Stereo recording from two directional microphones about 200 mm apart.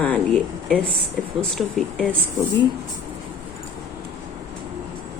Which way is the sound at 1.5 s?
Centre (ahead or behind).